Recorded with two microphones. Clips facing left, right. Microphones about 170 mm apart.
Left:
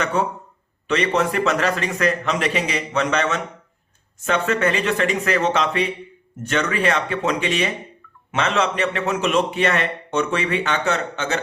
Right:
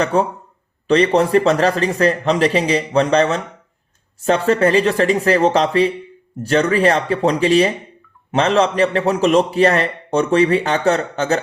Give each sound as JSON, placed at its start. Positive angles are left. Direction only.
{"t": 0.0, "sound": "a man's voice", "side_deg": -35}